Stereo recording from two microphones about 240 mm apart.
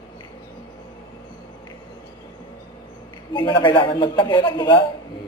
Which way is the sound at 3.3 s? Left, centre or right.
Centre.